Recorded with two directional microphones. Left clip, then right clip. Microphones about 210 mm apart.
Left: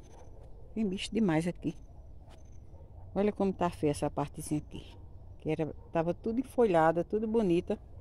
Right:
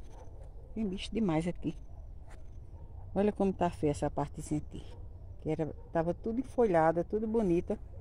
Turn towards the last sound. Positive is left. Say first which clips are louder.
# left 1 dB
turn(degrees=10)  # may be behind; listen again after turning